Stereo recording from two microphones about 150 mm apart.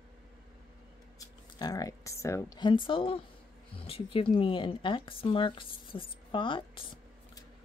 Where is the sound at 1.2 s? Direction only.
25° left (ahead or behind).